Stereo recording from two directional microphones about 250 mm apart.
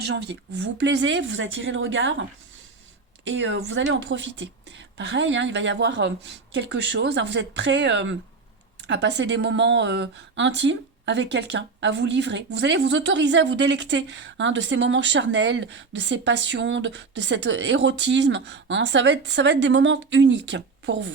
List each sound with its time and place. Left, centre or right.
0.0 s a woman's voice: right
3.2 s a woman's voice: right